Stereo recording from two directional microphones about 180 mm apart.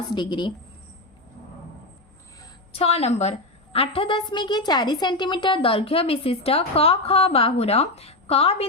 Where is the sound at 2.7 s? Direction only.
35° left (ahead or behind).